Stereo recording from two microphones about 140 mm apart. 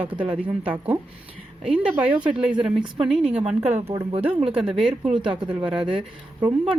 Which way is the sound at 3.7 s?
45° right (ahead or behind).